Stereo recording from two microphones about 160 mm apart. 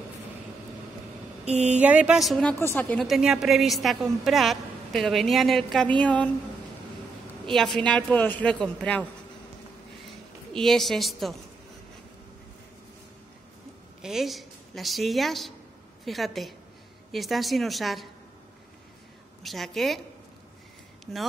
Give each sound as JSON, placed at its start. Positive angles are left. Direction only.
{"t": 1.5, "sound": "speech", "side_deg": -45}
{"t": 1.8, "sound": "a woman's voice", "side_deg": -10}
{"t": 3.1, "sound": "a woman's voice", "side_deg": -5}
{"t": 7.4, "sound": "a man's voice", "side_deg": 0}
{"t": 10.5, "sound": "a woman's voice", "side_deg": 5}
{"t": 14.0, "sound": "a woman's voice", "side_deg": 0}
{"t": 19.4, "sound": "a woman's voice", "side_deg": 0}
{"t": 21.0, "sound": "a sound", "side_deg": 0}